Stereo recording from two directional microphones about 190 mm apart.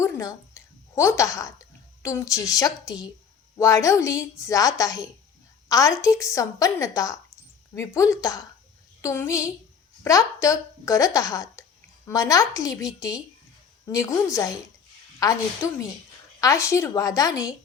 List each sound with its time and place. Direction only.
0.0 s a woman's voice: 15° left (ahead or behind)